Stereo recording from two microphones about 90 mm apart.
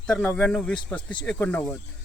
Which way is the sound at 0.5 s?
10° left (ahead or behind).